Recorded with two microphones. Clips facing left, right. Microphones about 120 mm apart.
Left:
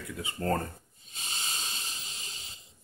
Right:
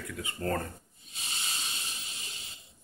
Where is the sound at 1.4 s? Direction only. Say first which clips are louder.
Left 1 dB; 35° left (ahead or behind).